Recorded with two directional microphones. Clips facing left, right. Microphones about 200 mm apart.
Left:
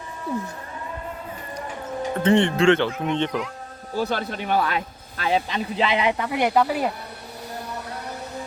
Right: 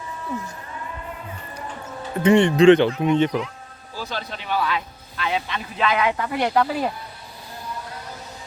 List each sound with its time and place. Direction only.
1.5 s music: 15° left (ahead or behind)
2.2 s speech: 15° right (ahead or behind)
3.1 s speech: 5° right (ahead or behind)
3.9 s speech: 60° left (ahead or behind); by 6.2 s 20° left (ahead or behind)
6.2 s speech: 10° left (ahead or behind)